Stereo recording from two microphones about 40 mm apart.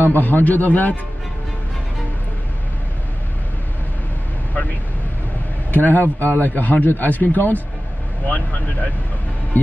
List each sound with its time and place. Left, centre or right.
0.0 s a man's voice: left
5.7 s a man's voice: left